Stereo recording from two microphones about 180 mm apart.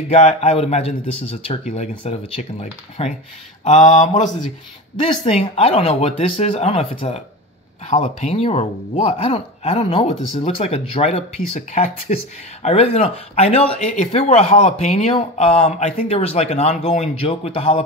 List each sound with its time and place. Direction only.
0.1 s speech: 40° left (ahead or behind)
4.9 s speech: 30° left (ahead or behind)